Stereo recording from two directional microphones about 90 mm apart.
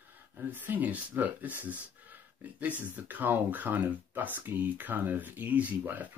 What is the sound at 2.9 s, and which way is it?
Speech, 20° right (ahead or behind).